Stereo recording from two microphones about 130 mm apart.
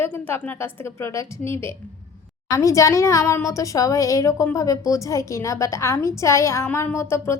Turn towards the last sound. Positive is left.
turn(degrees=20)  # may be behind; listen again after turning